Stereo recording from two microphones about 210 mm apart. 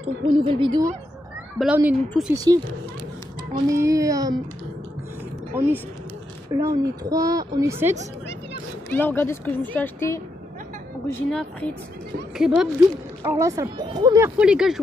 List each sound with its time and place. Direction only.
0.3 s speech: 25° right (ahead or behind)
1.6 s speech: 5° right (ahead or behind)
2.3 s speech: 15° right (ahead or behind)
5.5 s speech: 10° right (ahead or behind)
8.9 s speech: 10° left (ahead or behind)
12.4 s speech: centre (ahead or behind)